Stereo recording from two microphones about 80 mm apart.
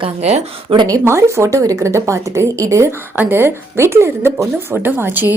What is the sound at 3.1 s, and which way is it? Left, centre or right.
Speech, right.